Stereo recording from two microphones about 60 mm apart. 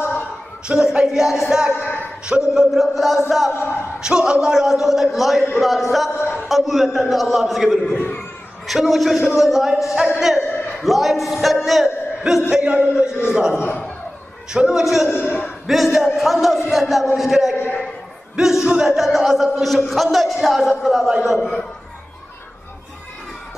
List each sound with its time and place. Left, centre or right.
0.7 s a man's voice: centre
3.5 s a man's voice: left
4.0 s a man's voice: centre
12.4 s a man's voice: centre
13.6 s a man's voice: left
14.5 s a man's voice: centre
15.0 s a man's voice: left
15.6 s a man's voice: centre
18.3 s a sound: centre
18.9 s a man's voice: centre
21.4 s a man's voice: centre